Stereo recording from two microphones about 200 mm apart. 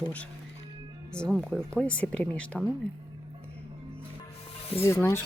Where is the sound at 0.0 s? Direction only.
5° left (ahead or behind).